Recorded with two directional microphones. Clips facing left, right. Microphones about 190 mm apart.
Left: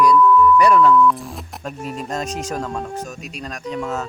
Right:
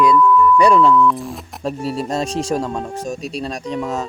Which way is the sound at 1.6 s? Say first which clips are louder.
Right 7 dB; 35° right (ahead or behind).